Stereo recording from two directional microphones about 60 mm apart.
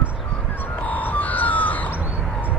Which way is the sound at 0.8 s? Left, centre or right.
Left.